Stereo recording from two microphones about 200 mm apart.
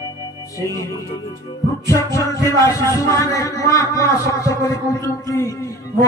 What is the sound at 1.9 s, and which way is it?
A man's voice, 15° left (ahead or behind).